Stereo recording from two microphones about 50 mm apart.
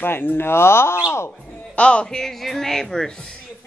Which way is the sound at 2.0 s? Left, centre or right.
Centre.